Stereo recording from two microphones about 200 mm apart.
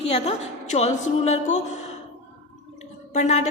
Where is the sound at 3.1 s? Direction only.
35° left (ahead or behind).